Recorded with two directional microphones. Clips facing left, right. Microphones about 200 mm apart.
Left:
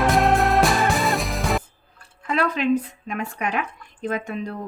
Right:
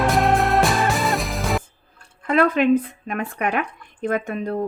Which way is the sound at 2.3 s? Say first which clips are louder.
Right 4 dB; 55° right (ahead or behind).